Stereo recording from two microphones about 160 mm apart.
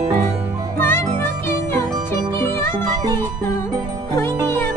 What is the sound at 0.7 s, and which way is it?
Music, 15° left (ahead or behind).